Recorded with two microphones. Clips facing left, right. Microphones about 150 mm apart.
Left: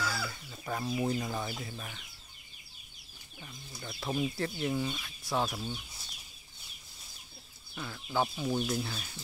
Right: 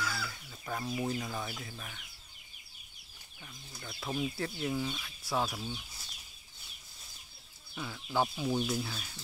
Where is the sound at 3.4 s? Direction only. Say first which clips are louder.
Left 3 dB; 10° left (ahead or behind).